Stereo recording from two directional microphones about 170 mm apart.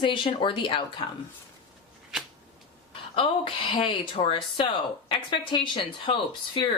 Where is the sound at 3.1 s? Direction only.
30° left (ahead or behind).